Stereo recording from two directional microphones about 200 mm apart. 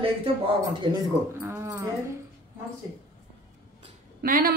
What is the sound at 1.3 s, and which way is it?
Speech, 10° right (ahead or behind).